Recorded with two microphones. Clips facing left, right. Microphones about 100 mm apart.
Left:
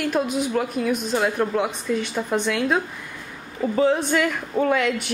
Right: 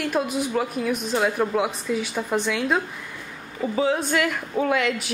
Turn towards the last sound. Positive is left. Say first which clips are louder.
# left 2 dB
turn(degrees=0)  # may be behind; listen again after turning